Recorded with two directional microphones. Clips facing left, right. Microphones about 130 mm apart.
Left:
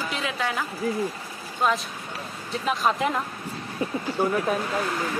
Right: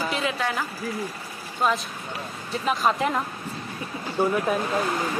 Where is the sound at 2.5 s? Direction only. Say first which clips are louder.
Right 1 dB; centre (ahead or behind).